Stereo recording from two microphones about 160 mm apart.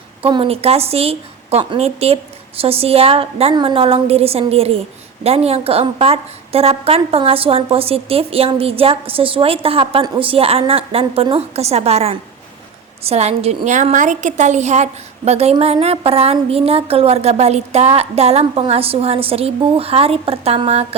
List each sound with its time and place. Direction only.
0.2 s a woman's voice: 35° right (ahead or behind)